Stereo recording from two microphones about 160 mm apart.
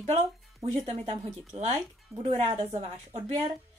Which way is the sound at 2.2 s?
40° right (ahead or behind).